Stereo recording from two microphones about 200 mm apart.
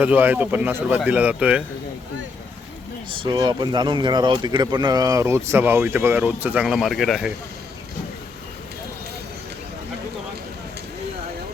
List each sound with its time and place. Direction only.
0.0 s speech: 10° right (ahead or behind)
3.1 s speech: 25° right (ahead or behind); by 7.3 s centre (ahead or behind)